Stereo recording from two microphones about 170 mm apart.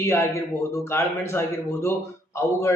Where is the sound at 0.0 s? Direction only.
15° left (ahead or behind).